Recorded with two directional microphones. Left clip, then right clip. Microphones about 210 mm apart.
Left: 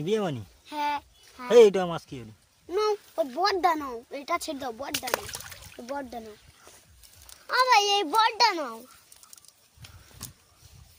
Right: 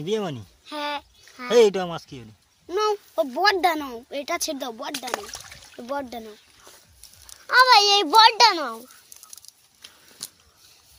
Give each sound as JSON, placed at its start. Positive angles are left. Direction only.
{"t": 0.0, "sound": "speech", "side_deg": 5}
{"t": 0.6, "sound": "speech", "side_deg": -30}
{"t": 1.5, "sound": "speech", "side_deg": 5}
{"t": 2.6, "sound": "speech", "side_deg": -35}
{"t": 5.1, "sound": "speech", "side_deg": 25}
{"t": 5.7, "sound": "speech", "side_deg": -45}
{"t": 7.4, "sound": "a child's voice", "side_deg": -30}
{"t": 9.8, "sound": "a sound", "side_deg": -15}